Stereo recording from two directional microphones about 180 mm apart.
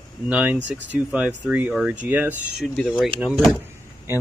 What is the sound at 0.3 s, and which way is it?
Speech, 10° right (ahead or behind).